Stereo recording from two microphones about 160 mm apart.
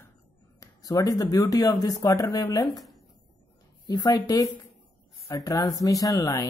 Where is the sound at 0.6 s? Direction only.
20° left (ahead or behind).